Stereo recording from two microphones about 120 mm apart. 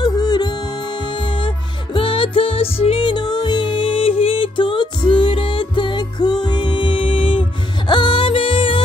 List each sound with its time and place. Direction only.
0.0 s music: 35° left (ahead or behind)